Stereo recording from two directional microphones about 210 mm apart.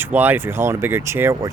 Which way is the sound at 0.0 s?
10° right (ahead or behind).